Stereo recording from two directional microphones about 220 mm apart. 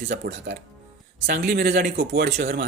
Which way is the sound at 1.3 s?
45° right (ahead or behind).